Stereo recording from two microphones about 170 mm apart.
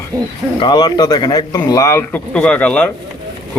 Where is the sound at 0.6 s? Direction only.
25° left (ahead or behind).